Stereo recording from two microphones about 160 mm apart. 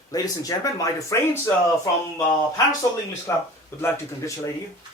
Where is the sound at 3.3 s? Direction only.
20° left (ahead or behind).